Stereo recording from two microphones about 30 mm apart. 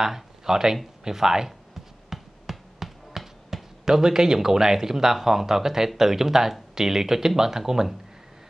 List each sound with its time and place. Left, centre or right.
0.0 s speech: centre
2.0 s a sound: centre
3.8 s speech: centre